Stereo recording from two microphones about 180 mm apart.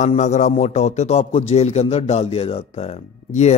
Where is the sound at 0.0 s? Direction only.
40° left (ahead or behind).